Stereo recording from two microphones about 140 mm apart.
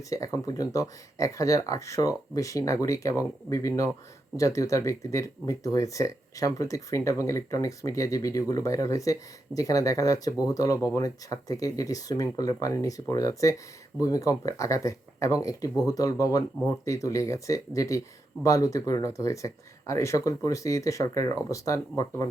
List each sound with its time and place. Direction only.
0.1 s speech: 25° left (ahead or behind)